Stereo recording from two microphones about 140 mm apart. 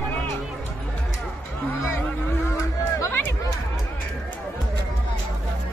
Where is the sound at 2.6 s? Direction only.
20° left (ahead or behind).